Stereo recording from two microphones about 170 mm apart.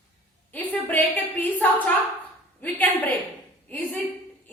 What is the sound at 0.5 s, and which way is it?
A woman's voice, 10° left (ahead or behind).